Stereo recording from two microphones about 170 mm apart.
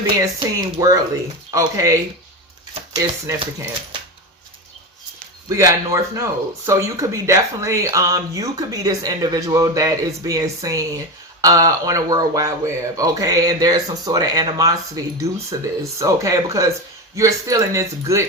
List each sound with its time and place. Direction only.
0.3 s speech: 20° right (ahead or behind)
5.5 s a man's voice: 15° right (ahead or behind)